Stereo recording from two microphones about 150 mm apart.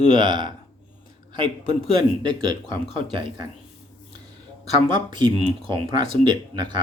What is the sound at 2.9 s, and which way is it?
Speech, 35° right (ahead or behind).